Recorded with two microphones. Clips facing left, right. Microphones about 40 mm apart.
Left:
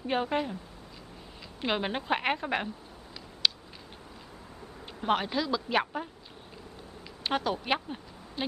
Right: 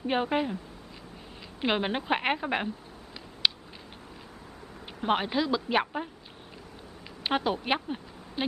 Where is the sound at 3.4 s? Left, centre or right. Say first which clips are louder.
Right 1 dB; centre.